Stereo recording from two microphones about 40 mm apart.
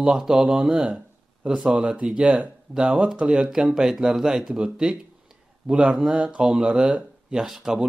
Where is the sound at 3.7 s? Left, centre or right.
Centre; by 7.0 s right.